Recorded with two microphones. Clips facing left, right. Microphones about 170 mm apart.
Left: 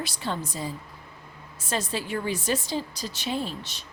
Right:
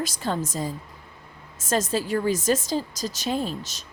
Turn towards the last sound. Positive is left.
turn(degrees=-45)  # may be behind; listen again after turning